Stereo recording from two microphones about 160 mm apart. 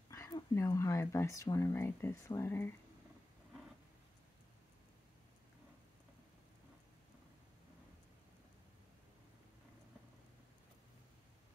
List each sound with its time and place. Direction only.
0.1 s speech: 20° left (ahead or behind)